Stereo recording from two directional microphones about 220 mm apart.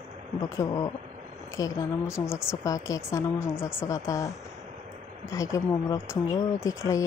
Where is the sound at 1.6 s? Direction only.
15° left (ahead or behind).